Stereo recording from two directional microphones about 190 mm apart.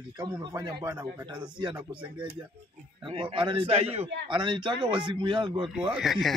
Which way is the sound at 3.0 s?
25° right (ahead or behind).